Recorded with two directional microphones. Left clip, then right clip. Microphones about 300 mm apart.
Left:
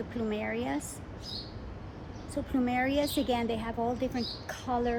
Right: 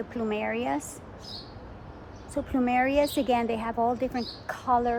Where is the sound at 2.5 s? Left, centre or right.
Right.